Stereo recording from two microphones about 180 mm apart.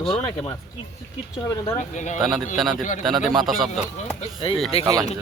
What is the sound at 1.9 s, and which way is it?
Speech, 40° left (ahead or behind).